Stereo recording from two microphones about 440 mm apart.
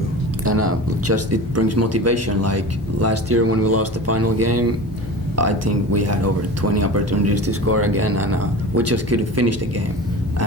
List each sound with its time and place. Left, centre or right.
0.4 s a man's voice: right